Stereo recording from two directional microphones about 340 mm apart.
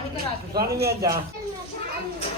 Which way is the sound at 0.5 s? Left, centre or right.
Right.